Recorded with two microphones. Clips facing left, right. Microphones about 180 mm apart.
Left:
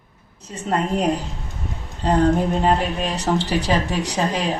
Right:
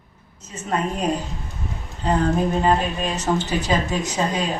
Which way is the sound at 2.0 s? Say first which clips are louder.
Left 3 dB; 35° left (ahead or behind).